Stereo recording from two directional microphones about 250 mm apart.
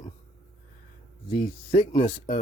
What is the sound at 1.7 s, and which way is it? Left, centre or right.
Speech, left.